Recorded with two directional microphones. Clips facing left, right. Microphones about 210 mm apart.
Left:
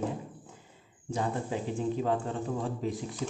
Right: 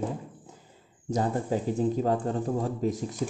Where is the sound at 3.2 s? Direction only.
40° right (ahead or behind).